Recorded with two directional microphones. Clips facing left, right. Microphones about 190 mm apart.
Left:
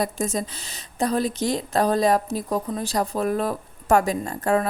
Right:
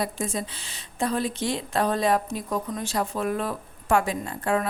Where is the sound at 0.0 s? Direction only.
40° left (ahead or behind).